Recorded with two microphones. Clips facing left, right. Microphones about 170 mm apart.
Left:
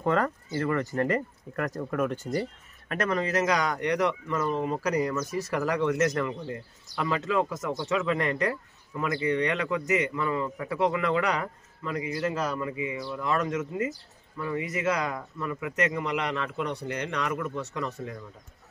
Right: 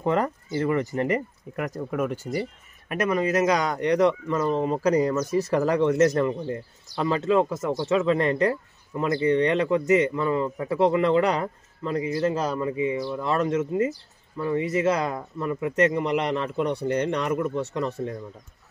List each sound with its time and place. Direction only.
0.0 s speech: 20° right (ahead or behind)